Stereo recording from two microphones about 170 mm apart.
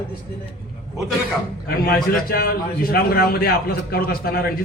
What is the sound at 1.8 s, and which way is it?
A man's voice, 65° left (ahead or behind).